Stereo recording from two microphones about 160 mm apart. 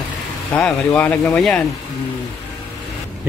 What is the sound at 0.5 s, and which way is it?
Speech, 5° left (ahead or behind).